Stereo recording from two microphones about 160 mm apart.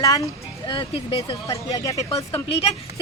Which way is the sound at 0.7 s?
30° left (ahead or behind).